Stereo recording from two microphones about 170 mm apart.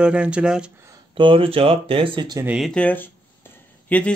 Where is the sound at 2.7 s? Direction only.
10° left (ahead or behind).